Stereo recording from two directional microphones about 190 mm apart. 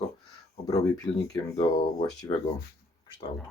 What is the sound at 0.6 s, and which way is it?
Speech, 15° left (ahead or behind).